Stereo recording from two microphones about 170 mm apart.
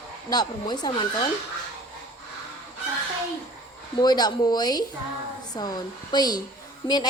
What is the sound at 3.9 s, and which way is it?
A woman's voice, 25° left (ahead or behind).